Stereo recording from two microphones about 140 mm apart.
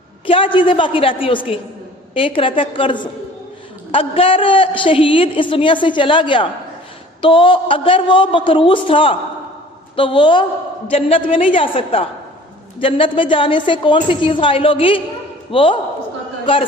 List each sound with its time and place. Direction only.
0.3 s a woman's voice: 40° left (ahead or behind)